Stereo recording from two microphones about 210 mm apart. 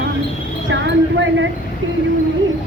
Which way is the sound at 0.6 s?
65° right (ahead or behind).